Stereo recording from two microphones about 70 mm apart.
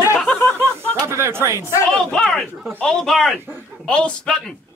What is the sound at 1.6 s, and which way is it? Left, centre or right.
Speech, left.